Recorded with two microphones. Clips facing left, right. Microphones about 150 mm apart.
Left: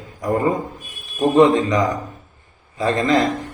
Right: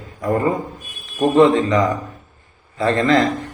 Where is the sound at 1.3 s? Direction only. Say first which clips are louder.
Right 1 dB; 15° left (ahead or behind).